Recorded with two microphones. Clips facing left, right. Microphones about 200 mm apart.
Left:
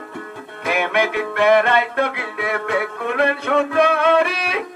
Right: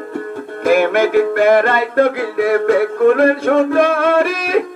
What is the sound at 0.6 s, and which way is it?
Music, 50° right (ahead or behind).